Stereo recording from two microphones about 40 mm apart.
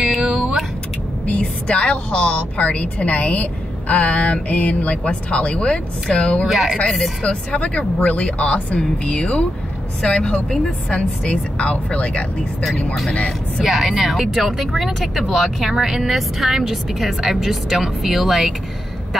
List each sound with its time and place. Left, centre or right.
0.2 s vehicle: right
1.4 s a woman's voice: left
6.4 s speech: centre
7.2 s a woman's voice: left
8.7 s speech: left
13.7 s a woman's voice: centre